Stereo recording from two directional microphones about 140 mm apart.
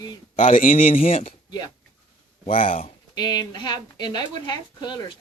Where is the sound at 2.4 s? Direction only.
40° left (ahead or behind).